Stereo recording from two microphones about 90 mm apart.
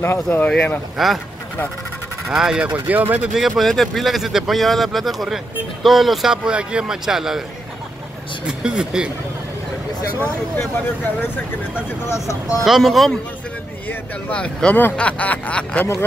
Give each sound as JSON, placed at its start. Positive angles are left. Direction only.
{"t": 0.0, "sound": "speech", "side_deg": 25}
{"t": 0.9, "sound": "speech", "side_deg": 0}
{"t": 2.3, "sound": "speech", "side_deg": -10}
{"t": 2.9, "sound": "speech", "side_deg": -20}
{"t": 3.3, "sound": "speech", "side_deg": 0}
{"t": 8.5, "sound": "speech", "side_deg": -10}
{"t": 12.1, "sound": "speech", "side_deg": 35}
{"t": 12.6, "sound": "speech", "side_deg": 0}